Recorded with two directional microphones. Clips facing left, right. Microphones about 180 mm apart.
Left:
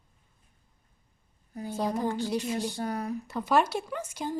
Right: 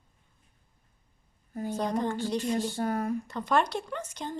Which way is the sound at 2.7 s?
50° right (ahead or behind).